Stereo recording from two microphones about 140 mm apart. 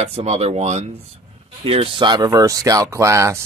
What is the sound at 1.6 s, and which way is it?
Speech, 40° right (ahead or behind).